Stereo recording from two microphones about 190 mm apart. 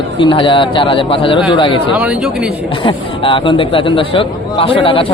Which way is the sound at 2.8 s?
25° left (ahead or behind).